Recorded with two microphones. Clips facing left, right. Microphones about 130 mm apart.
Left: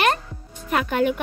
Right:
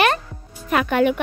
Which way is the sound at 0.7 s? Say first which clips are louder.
Right 3 dB; 80° right.